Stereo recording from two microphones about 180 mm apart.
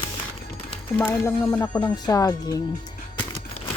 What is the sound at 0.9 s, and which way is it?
Speech, 10° left (ahead or behind).